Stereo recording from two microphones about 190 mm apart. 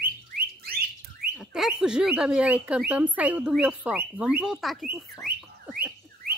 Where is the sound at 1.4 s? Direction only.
Centre (ahead or behind).